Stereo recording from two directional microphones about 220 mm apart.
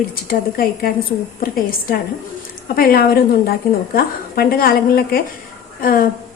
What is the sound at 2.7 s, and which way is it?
A woman's voice, 40° left (ahead or behind).